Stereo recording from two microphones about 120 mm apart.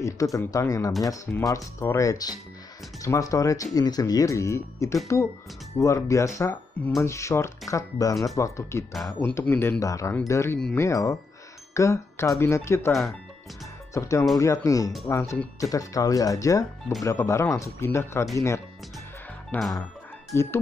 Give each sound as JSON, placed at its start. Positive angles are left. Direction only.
{"t": 0.0, "sound": "speech", "side_deg": 25}
{"t": 9.2, "sound": "speech", "side_deg": 15}
{"t": 13.9, "sound": "speech", "side_deg": 25}
{"t": 19.5, "sound": "music", "side_deg": 15}
{"t": 20.3, "sound": "speech", "side_deg": 20}